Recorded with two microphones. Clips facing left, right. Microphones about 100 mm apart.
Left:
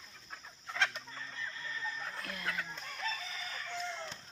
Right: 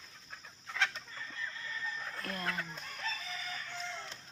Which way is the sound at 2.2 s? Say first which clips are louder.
Right 4 dB; 40° right (ahead or behind).